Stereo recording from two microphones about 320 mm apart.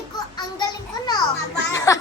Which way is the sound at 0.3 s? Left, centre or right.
Centre.